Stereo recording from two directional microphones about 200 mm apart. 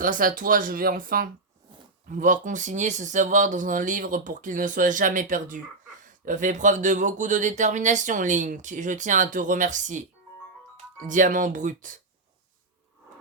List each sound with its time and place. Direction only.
0.0 s speech: 45° right (ahead or behind)
11.1 s speech: 40° right (ahead or behind)